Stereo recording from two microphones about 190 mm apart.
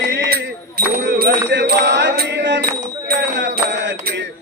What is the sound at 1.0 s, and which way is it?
Bicycle bell, 65° right (ahead or behind).